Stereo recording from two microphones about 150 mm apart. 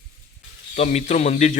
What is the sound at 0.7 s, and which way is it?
Speech, 50° left (ahead or behind).